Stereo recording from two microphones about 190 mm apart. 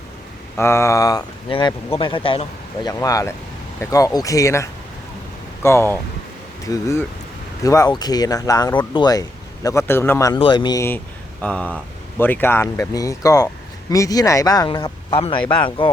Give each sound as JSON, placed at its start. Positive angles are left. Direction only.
{"t": 0.5, "sound": "a man's voice", "side_deg": 15}
{"t": 10.3, "sound": "a man's voice", "side_deg": 25}